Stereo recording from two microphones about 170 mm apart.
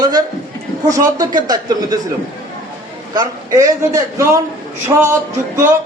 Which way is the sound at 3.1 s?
20° right (ahead or behind).